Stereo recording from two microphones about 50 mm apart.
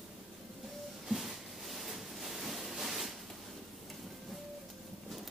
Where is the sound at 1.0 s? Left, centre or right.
Centre.